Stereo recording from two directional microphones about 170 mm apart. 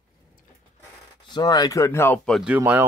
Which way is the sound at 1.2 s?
25° left (ahead or behind).